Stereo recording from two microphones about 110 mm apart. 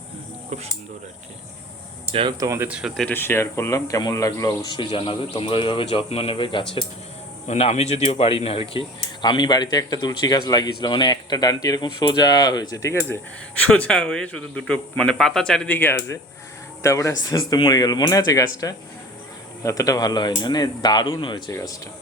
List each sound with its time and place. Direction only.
2.4 s speech: 25° right (ahead or behind)
2.6 s speech: 10° right (ahead or behind)
3.1 s speech: 20° left (ahead or behind); by 6.8 s 50° left (ahead or behind)
7.4 s speech: 85° left; by 8.8 s 60° left (ahead or behind)
9.2 s speech: 40° left (ahead or behind); by 13.1 s 20° left (ahead or behind)
13.6 s speech: 10° left (ahead or behind); by 21.5 s 45° left (ahead or behind)